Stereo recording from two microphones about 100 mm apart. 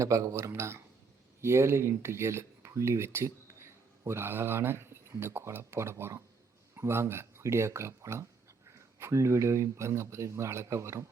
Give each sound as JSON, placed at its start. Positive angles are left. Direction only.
{"t": 0.0, "sound": "speech", "side_deg": -30}